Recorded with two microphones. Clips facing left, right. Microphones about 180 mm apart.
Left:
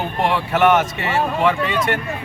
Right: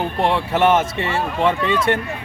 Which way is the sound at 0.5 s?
30° right (ahead or behind).